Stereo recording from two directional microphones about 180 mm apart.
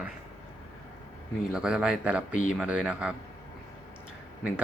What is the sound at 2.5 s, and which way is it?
Speech, 5° right (ahead or behind).